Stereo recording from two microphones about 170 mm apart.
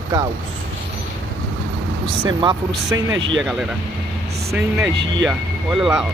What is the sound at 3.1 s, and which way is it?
Speech, 90° right.